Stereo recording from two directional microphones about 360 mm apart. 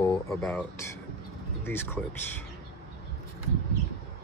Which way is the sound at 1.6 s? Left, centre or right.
Centre.